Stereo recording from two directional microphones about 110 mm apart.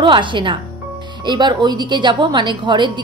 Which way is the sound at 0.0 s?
45° right (ahead or behind).